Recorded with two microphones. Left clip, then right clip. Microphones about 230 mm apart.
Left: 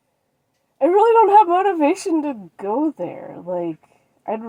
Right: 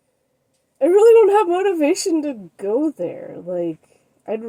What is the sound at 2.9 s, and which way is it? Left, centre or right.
Speech, centre.